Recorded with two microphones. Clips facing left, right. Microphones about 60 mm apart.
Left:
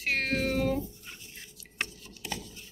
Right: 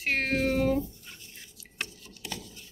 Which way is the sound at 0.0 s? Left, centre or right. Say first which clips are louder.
Right 1 dB; centre.